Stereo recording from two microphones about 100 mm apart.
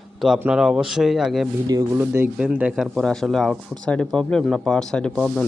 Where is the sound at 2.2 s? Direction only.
10° right (ahead or behind).